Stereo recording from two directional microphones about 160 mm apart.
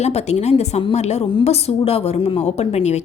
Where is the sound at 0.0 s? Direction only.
45° left (ahead or behind).